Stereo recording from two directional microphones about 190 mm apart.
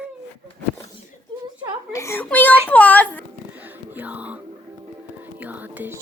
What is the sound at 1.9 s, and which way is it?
A child's voice, 15° left (ahead or behind).